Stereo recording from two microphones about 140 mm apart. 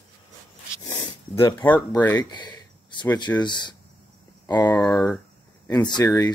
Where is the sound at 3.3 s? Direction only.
35° left (ahead or behind).